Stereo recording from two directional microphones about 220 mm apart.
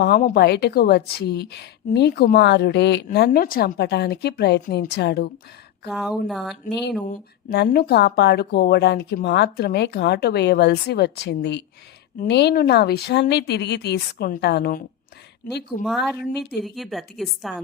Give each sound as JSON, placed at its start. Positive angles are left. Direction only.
{"t": 0.0, "sound": "a woman's voice", "side_deg": 40}
{"t": 5.9, "sound": "a woman's voice", "side_deg": 0}
{"t": 6.7, "sound": "a woman's voice", "side_deg": 50}
{"t": 15.8, "sound": "a woman's voice", "side_deg": 0}
{"t": 16.3, "sound": "a woman's voice", "side_deg": 45}
{"t": 16.6, "sound": "a woman's voice", "side_deg": 0}